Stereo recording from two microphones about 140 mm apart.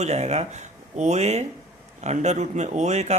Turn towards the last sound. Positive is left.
turn(degrees=-55)  # may be behind; listen again after turning